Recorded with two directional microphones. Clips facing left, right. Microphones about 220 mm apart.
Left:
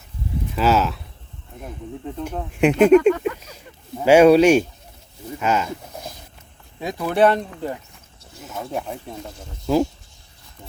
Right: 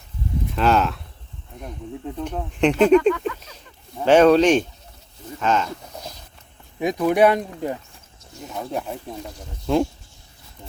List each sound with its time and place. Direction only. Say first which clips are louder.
0.5 s speech: left 1 dB; 5° left (ahead or behind)
3.1 s a sound: left 2 dB; 45° left (ahead or behind)
4.0 s speech: left 2 dB; 10° left (ahead or behind)
6.7 s speech: right 2 dB; 15° right (ahead or behind)
8.4 s speech: even; centre (ahead or behind)